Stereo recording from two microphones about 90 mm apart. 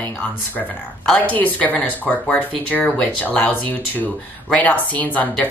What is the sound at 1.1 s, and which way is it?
Speech, 15° left (ahead or behind).